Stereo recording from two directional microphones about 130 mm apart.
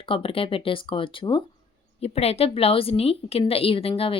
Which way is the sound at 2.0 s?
50° left (ahead or behind).